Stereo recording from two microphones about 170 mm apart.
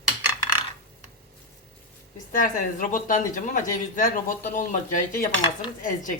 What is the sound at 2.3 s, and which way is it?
Speech, 50° left (ahead or behind).